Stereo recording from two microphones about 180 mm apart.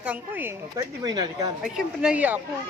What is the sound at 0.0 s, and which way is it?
Speech, 10° right (ahead or behind).